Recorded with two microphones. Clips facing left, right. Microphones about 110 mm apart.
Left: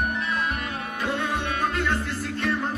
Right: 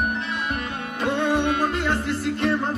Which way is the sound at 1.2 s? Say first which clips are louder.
Right 5 dB; 30° right (ahead or behind).